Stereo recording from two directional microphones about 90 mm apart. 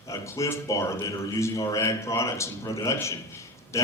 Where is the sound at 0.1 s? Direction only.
35° left (ahead or behind).